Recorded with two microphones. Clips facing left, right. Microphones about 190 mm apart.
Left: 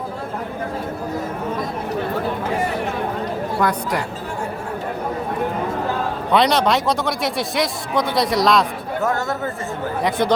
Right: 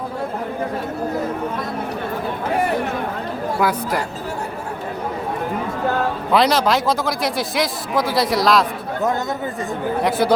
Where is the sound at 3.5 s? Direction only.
5° right (ahead or behind).